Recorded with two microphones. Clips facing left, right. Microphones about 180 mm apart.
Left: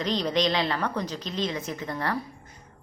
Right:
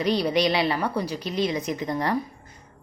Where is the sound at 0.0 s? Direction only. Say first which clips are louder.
Right 3 dB; 10° right (ahead or behind).